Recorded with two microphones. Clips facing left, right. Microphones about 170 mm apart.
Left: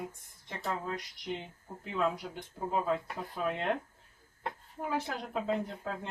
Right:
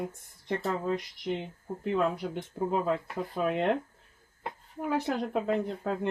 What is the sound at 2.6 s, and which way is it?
Speech, 65° right (ahead or behind).